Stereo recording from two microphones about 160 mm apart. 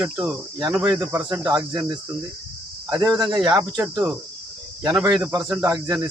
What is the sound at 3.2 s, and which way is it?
Speech, 25° right (ahead or behind).